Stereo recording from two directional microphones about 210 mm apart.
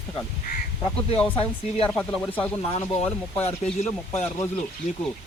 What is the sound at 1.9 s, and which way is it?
Speech, 5° left (ahead or behind).